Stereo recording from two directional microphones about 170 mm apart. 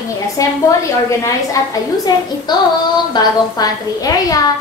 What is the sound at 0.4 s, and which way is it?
A woman's voice, 20° left (ahead or behind).